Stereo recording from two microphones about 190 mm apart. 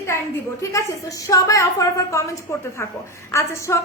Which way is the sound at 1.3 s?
15° left (ahead or behind).